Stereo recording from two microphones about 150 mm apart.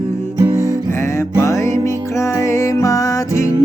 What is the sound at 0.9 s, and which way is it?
Music, 20° left (ahead or behind).